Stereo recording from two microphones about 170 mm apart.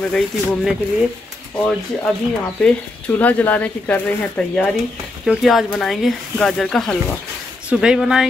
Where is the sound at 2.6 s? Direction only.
10° left (ahead or behind).